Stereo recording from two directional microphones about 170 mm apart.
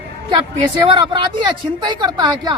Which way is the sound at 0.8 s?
25° right (ahead or behind).